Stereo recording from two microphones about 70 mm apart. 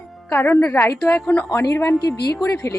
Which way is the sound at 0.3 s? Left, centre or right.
Left.